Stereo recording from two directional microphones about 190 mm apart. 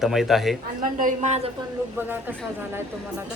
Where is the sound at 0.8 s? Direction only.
40° right (ahead or behind).